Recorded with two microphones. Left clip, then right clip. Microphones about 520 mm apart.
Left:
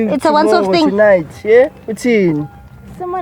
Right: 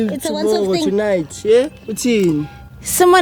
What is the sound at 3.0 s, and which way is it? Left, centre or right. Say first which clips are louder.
Speech: right 12 dB; right.